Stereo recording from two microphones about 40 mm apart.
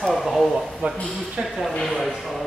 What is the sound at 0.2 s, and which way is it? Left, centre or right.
Speech, centre.